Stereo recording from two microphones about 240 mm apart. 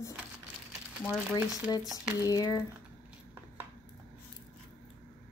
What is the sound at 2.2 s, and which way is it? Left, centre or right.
Speech, centre.